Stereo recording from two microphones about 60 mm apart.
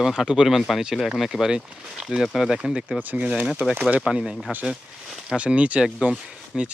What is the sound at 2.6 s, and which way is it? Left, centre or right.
Speech, centre.